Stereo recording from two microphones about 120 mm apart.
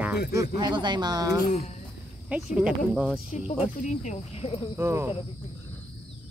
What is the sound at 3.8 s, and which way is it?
Speech, 80° left.